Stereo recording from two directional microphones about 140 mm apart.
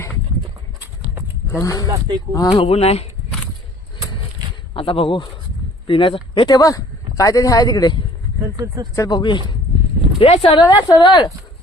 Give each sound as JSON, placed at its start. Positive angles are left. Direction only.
{"t": 1.5, "sound": "speech", "side_deg": 25}
{"t": 1.9, "sound": "speech", "side_deg": -35}
{"t": 2.3, "sound": "speech", "side_deg": 25}
{"t": 2.6, "sound": "speech", "side_deg": 45}
{"t": 4.7, "sound": "speech", "side_deg": 40}
{"t": 8.5, "sound": "speech", "side_deg": -25}
{"t": 9.0, "sound": "speech", "side_deg": 30}
{"t": 10.2, "sound": "speech", "side_deg": 45}
{"t": 10.8, "sound": "speech", "side_deg": 30}